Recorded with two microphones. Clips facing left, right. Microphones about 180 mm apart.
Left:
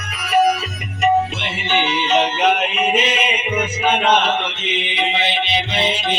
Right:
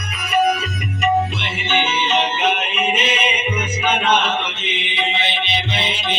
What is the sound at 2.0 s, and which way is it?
Music, 40° left (ahead or behind).